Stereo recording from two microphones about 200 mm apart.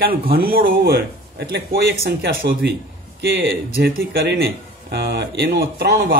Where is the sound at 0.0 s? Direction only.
50° right (ahead or behind).